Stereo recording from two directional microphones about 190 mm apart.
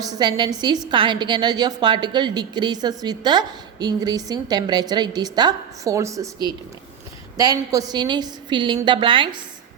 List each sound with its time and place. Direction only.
0.0 s a woman's voice: 20° right (ahead or behind)